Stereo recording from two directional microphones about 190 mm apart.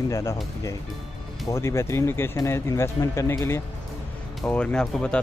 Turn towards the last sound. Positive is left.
turn(degrees=5)  # may be behind; listen again after turning